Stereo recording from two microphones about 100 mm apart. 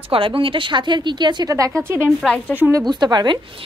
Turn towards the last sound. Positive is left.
turn(degrees=-45)  # may be behind; listen again after turning